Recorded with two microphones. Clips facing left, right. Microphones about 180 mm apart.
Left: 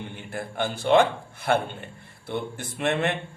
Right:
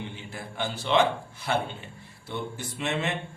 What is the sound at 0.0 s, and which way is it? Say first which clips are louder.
Speech: left 4 dB; 55° left (ahead or behind).